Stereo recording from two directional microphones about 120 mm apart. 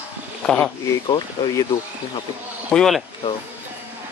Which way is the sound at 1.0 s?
35° left (ahead or behind).